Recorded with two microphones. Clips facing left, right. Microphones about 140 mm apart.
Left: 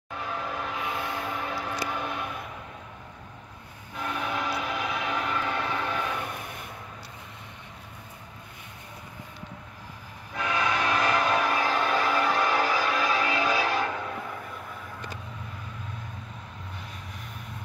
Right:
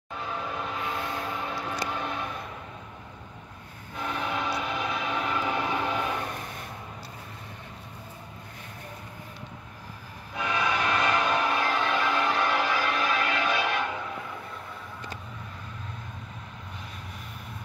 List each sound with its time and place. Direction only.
0.3 s a sound: 5° left (ahead or behind)
1.7 s vehicle: centre (ahead or behind)
3.9 s train: centre (ahead or behind); by 6.2 s 15° right (ahead or behind)
10.3 s train: 5° right (ahead or behind)
10.9 s music: 5° left (ahead or behind)
13.5 s change ringing: 35° left (ahead or behind)